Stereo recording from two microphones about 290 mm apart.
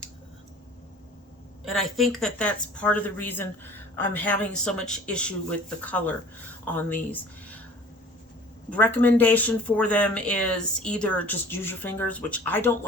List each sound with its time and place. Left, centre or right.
1.7 s speech: centre
8.7 s speech: centre